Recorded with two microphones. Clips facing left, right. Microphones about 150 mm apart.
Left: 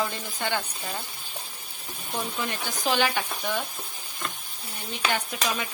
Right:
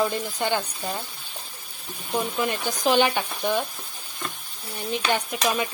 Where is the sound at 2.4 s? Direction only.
15° right (ahead or behind).